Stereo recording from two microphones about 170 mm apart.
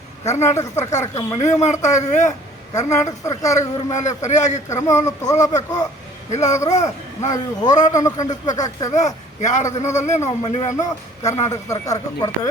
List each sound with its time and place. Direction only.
0.4 s speech: 15° left (ahead or behind)
1.4 s a man's voice: 45° left (ahead or behind)
3.0 s speech: 20° left (ahead or behind)
3.9 s a man's voice: 45° left (ahead or behind)
4.8 s speech: 20° left (ahead or behind)
6.3 s a man's voice: 45° left (ahead or behind)
7.2 s speech: 20° left (ahead or behind)
8.9 s a man's voice: 45° left (ahead or behind)
10.8 s a man's voice: 20° left (ahead or behind)